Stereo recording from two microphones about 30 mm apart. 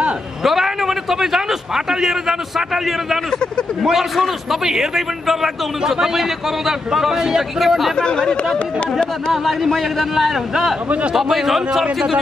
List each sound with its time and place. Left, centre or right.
0.4 s a sound: centre
4.5 s a man's voice: centre
7.9 s speech: left
8.5 s a man's voice: centre